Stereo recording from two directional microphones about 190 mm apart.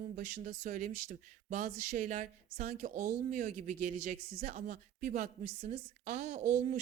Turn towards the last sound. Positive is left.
turn(degrees=-40)  # may be behind; listen again after turning